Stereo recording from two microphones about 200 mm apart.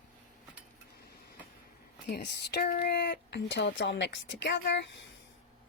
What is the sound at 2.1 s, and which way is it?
Speech, 50° left (ahead or behind).